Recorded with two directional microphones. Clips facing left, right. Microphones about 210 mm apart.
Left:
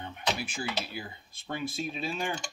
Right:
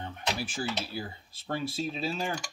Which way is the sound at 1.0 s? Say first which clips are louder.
Right 3 dB; 30° right (ahead or behind).